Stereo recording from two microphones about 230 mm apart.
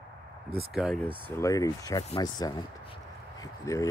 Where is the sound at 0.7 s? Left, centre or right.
Centre.